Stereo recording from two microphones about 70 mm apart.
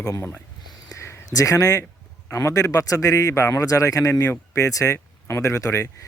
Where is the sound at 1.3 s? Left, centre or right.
Left.